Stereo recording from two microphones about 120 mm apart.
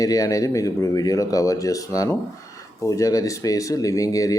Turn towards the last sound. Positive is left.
turn(degrees=30)  # may be behind; listen again after turning